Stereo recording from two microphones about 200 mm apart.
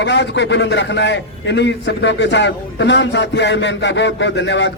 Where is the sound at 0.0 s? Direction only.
60° left (ahead or behind).